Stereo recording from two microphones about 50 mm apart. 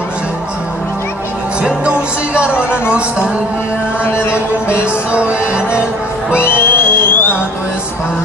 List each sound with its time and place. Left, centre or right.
1.6 s music: right
4.0 s speech: left
5.1 s music: right
6.3 s music: left